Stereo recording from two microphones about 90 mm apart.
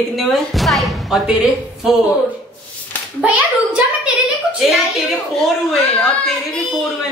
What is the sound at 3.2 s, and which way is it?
Speech, 15° right (ahead or behind).